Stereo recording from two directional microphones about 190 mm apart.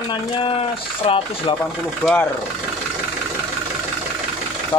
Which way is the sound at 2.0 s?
5° left (ahead or behind).